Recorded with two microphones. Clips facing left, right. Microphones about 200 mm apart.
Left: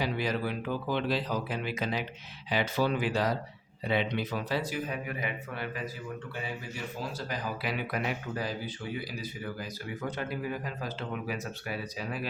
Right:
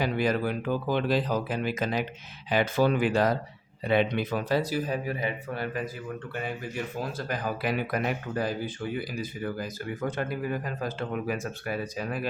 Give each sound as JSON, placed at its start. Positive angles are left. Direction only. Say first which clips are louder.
{"t": 0.0, "sound": "speech", "louder": "right 5 dB", "side_deg": -50}
{"t": 7.0, "sound": "speech", "louder": "right 2 dB", "side_deg": -55}